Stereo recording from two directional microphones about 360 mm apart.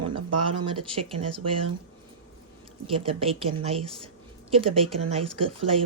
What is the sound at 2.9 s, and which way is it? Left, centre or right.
Speech, centre.